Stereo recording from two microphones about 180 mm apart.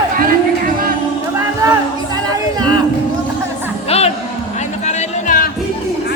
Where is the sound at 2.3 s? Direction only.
25° right (ahead or behind).